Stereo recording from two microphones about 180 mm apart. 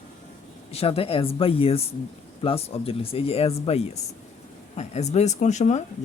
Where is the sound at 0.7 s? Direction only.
35° left (ahead or behind).